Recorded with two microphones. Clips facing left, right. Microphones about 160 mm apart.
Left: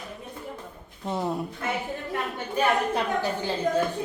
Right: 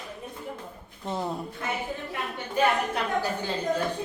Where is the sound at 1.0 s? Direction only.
5° left (ahead or behind).